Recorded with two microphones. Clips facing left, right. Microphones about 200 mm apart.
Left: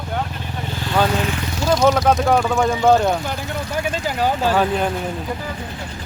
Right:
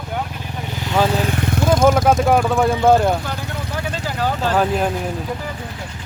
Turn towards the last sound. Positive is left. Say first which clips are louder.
# right 1 dB
turn(degrees=0)  # may be behind; listen again after turning